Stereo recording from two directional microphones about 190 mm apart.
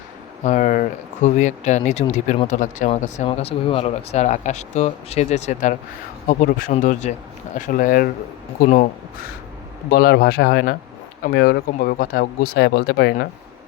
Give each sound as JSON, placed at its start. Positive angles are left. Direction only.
{"t": 0.4, "sound": "speech", "side_deg": 40}
{"t": 9.9, "sound": "speech", "side_deg": 55}